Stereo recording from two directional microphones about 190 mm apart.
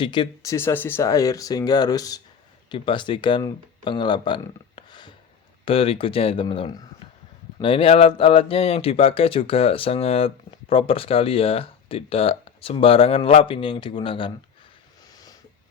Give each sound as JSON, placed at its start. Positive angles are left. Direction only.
{"t": 0.0, "sound": "speech", "side_deg": 25}
{"t": 0.5, "sound": "speech", "side_deg": 10}